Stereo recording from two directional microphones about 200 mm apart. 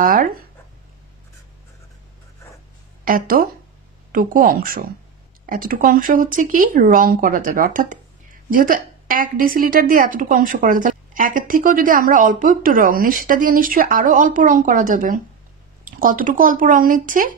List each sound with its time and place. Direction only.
0.0 s speech: 45° right (ahead or behind)
3.1 s a woman's voice: 45° right (ahead or behind)